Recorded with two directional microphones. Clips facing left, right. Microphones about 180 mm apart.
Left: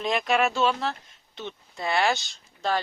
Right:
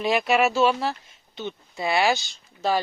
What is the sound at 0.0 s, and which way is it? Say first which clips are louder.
Speech: right 3 dB; 5° right (ahead or behind).